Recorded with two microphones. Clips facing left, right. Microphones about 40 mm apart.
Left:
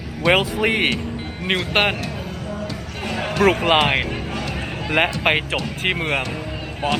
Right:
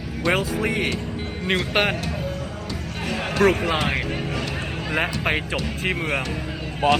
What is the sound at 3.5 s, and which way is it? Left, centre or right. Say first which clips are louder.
Speech: left 6 dB; left.